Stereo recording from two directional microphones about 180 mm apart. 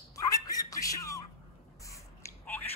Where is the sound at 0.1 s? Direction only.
20° left (ahead or behind).